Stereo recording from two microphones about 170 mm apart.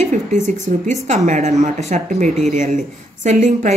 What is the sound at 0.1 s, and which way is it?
Speech, 45° right (ahead or behind).